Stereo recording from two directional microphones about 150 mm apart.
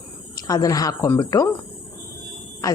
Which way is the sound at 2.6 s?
25° left (ahead or behind).